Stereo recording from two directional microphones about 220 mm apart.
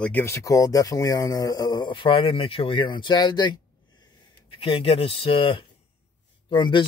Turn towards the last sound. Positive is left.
turn(degrees=20)  # may be behind; listen again after turning